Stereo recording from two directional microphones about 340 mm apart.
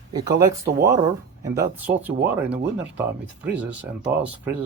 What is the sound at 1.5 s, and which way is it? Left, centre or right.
Speech, centre.